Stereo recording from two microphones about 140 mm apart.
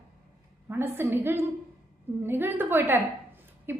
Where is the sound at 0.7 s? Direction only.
15° right (ahead or behind).